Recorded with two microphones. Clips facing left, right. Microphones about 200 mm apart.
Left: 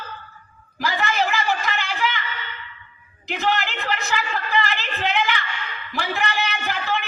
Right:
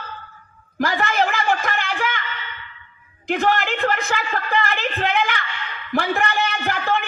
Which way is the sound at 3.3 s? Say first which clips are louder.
Right 4 dB; 50° right (ahead or behind).